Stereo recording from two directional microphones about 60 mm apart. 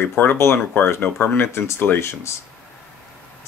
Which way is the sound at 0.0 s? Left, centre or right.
Left.